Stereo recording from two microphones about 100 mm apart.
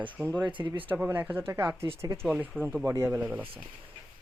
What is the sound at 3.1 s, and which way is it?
Speech, 15° right (ahead or behind).